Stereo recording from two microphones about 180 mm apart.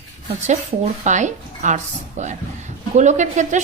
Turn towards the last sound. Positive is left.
turn(degrees=-40)  # may be behind; listen again after turning